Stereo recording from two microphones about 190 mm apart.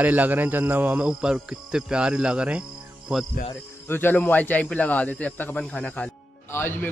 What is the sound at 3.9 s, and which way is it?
A man's voice, 10° left (ahead or behind).